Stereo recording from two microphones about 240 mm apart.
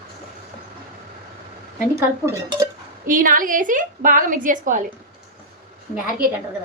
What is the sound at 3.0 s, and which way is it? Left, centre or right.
A woman's voice, right.